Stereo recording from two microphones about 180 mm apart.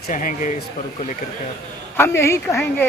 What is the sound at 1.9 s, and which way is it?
Speech, 15° left (ahead or behind).